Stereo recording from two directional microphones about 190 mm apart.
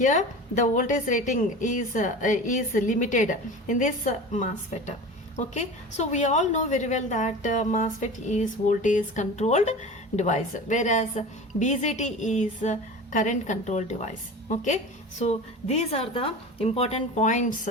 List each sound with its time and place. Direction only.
0.0 s a woman's voice: 40° left (ahead or behind)